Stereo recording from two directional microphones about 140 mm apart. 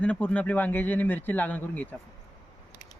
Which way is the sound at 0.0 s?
10° left (ahead or behind).